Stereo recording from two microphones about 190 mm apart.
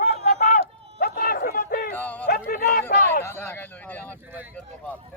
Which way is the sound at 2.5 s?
50° left (ahead or behind).